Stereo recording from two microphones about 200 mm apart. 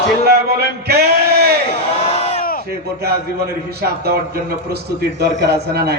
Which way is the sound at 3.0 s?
50° right (ahead or behind).